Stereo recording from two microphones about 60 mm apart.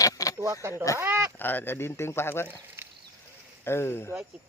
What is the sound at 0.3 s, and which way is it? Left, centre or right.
Speech, right.